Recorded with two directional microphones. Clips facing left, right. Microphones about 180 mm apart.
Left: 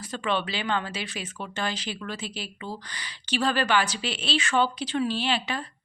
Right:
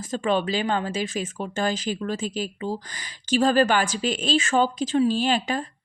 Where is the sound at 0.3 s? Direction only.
45° right (ahead or behind).